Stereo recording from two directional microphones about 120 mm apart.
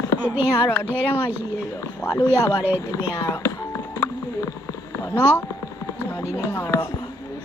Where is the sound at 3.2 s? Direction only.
25° left (ahead or behind).